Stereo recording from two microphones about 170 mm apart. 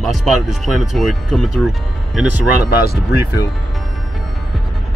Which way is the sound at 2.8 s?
65° left (ahead or behind).